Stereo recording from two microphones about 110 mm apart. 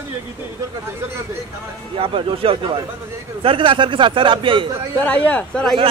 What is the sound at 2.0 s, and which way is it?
A man's voice, 55° right (ahead or behind).